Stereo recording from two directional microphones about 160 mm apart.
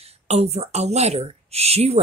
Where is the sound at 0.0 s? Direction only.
40° right (ahead or behind).